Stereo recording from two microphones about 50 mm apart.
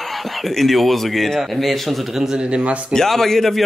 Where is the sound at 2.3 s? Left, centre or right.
Right.